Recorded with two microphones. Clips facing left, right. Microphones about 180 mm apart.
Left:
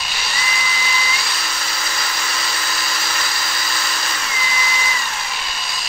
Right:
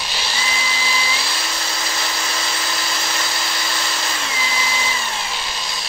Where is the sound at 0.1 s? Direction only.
30° right (ahead or behind).